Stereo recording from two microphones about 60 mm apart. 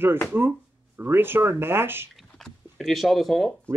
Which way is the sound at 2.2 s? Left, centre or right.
Centre.